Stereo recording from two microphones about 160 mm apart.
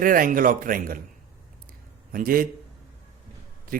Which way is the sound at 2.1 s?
60° right (ahead or behind).